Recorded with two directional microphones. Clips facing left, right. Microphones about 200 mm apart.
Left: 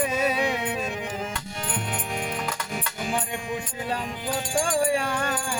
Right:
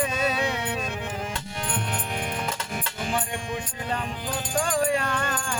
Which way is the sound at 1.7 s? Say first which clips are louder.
Even; centre (ahead or behind).